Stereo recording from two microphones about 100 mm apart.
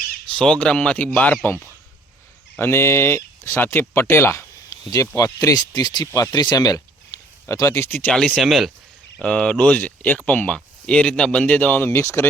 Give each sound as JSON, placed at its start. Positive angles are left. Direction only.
{"t": 0.3, "sound": "speech", "side_deg": 10}
{"t": 2.6, "sound": "speech", "side_deg": 25}
{"t": 6.1, "sound": "speech", "side_deg": 25}
{"t": 6.3, "sound": "speech", "side_deg": 45}
{"t": 7.4, "sound": "speech", "side_deg": 30}
{"t": 8.4, "sound": "speech", "side_deg": 0}